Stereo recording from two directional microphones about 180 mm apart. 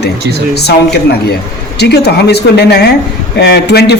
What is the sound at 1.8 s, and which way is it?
A man's voice, 65° left (ahead or behind).